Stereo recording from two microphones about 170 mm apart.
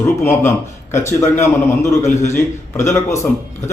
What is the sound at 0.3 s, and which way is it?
Speech, 15° left (ahead or behind).